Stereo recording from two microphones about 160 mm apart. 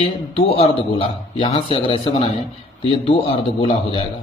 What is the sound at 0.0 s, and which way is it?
A man's voice, 35° left (ahead or behind).